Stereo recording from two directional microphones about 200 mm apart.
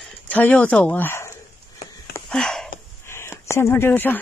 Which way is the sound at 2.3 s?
Centre (ahead or behind).